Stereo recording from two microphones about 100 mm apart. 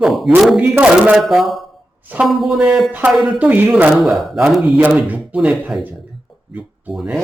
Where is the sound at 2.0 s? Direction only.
15° right (ahead or behind).